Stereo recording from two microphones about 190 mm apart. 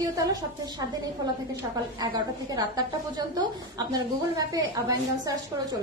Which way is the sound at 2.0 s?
20° right (ahead or behind).